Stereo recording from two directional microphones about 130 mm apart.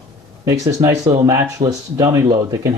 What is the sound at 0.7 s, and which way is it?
Speech, 25° right (ahead or behind).